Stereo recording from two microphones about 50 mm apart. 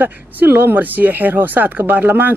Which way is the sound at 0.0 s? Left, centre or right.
Right.